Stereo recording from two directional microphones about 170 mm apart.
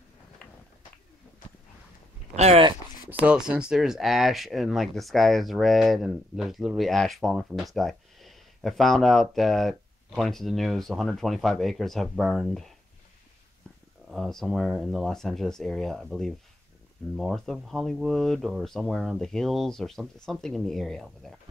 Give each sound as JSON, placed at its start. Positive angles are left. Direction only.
{"t": 0.4, "sound": "a sound", "side_deg": 5}
{"t": 2.3, "sound": "speech", "side_deg": -35}
{"t": 3.1, "sound": "speech", "side_deg": -5}
{"t": 14.1, "sound": "speech", "side_deg": 0}